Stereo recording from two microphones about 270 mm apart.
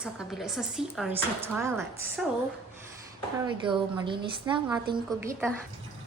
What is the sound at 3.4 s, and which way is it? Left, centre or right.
A woman's voice, centre.